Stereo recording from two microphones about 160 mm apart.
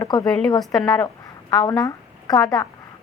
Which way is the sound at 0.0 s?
25° left (ahead or behind).